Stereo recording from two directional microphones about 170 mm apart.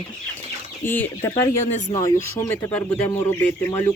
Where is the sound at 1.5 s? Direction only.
45° left (ahead or behind).